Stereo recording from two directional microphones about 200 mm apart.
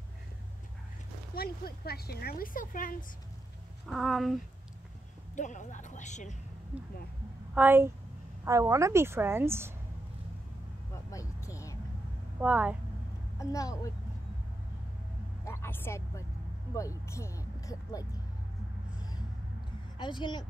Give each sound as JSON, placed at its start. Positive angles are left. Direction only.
{"t": 1.3, "sound": "speech", "side_deg": 50}
{"t": 3.8, "sound": "speech", "side_deg": 0}
{"t": 5.3, "sound": "a woman's voice", "side_deg": 40}
{"t": 7.5, "sound": "a woman's voice", "side_deg": -10}
{"t": 11.1, "sound": "a sound", "side_deg": 15}
{"t": 12.4, "sound": "a woman's voice", "side_deg": -5}
{"t": 13.4, "sound": "speech", "side_deg": 15}
{"t": 15.4, "sound": "a sound", "side_deg": 15}
{"t": 16.7, "sound": "speech", "side_deg": 15}
{"t": 20.0, "sound": "speech", "side_deg": 25}